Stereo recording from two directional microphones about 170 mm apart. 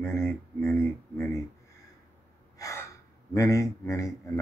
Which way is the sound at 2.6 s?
20° left (ahead or behind).